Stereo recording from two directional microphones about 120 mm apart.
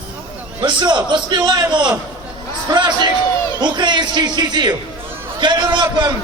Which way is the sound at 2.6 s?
40° right (ahead or behind).